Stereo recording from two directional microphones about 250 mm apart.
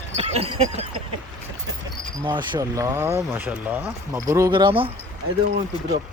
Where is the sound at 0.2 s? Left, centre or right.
Right.